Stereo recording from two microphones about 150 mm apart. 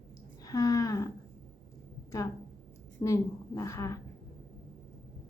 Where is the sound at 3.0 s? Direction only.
30° left (ahead or behind).